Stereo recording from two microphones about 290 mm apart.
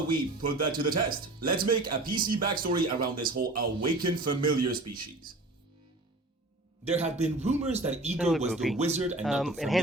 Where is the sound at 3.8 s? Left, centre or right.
Right.